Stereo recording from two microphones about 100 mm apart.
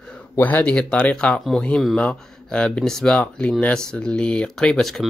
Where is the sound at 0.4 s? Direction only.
15° left (ahead or behind).